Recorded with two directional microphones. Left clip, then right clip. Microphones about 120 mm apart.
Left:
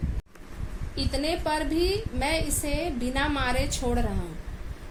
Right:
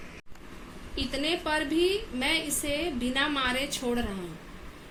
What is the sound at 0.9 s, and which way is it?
A woman's voice, 90° left.